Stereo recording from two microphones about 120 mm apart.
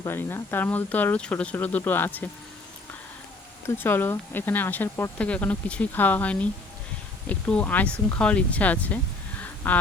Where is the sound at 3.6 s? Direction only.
20° left (ahead or behind).